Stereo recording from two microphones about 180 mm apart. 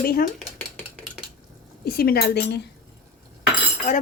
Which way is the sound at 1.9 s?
60° left (ahead or behind).